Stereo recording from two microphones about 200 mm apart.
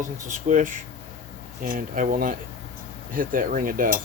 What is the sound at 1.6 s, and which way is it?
Speech, 45° right (ahead or behind).